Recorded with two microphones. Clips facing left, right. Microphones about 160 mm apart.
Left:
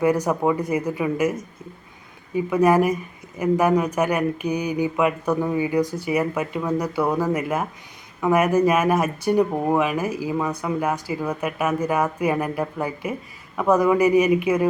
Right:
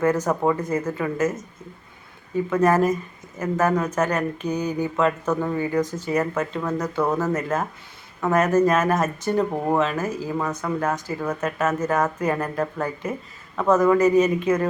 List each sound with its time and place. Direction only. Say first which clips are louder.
0.0 s speech: left 1 dB; 15° left (ahead or behind)